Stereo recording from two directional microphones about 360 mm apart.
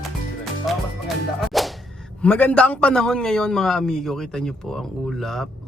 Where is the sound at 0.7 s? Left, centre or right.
Centre.